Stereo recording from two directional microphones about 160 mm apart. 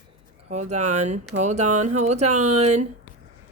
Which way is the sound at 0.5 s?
45° right (ahead or behind).